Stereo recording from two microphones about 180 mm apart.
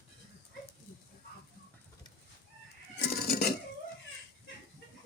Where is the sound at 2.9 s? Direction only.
60° left (ahead or behind).